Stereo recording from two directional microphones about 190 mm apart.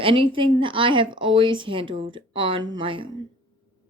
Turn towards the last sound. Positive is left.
turn(degrees=-25)  # may be behind; listen again after turning